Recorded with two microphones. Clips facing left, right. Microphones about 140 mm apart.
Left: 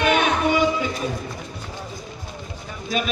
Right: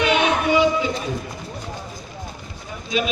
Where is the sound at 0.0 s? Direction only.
45° left (ahead or behind).